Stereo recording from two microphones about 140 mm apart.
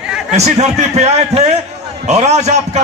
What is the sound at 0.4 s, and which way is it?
A man's voice, 50° right (ahead or behind).